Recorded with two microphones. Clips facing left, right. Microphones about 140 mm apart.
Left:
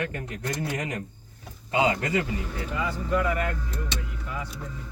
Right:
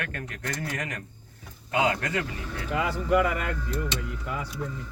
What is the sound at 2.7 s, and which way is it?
Speech, 75° right (ahead or behind).